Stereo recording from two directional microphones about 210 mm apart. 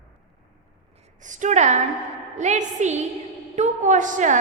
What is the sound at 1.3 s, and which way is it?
A woman's voice, 35° right (ahead or behind).